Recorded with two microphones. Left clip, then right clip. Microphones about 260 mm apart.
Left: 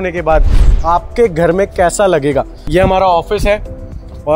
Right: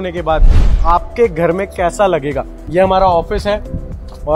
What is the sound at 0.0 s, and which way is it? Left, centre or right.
A man's voice, left.